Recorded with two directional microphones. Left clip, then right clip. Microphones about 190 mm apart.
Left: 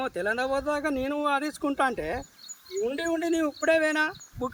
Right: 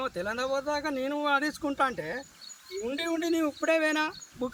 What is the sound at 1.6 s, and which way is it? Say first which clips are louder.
Speech: left 2 dB; 35° left (ahead or behind).